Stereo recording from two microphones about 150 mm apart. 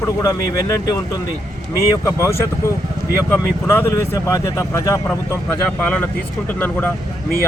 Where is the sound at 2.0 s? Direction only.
20° left (ahead or behind).